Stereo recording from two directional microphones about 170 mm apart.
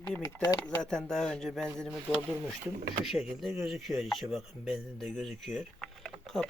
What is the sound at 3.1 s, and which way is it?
Speech, centre (ahead or behind).